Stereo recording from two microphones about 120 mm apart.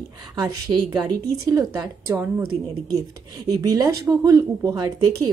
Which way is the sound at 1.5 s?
30° right (ahead or behind).